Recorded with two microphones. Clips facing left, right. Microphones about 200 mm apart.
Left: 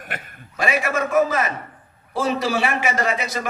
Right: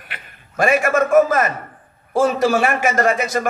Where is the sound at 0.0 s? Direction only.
50° left (ahead or behind).